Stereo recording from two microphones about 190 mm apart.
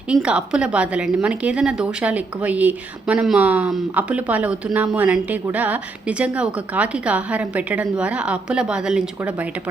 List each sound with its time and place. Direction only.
0.1 s a woman's voice: 5° right (ahead or behind)